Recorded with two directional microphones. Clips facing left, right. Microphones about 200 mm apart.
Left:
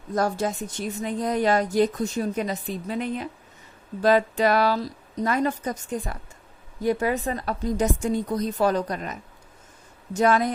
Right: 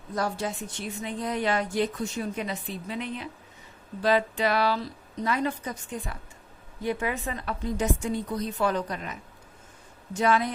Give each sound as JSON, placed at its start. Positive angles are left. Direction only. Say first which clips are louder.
{"t": 0.1, "sound": "a woman's voice", "louder": "left 5 dB", "side_deg": 45}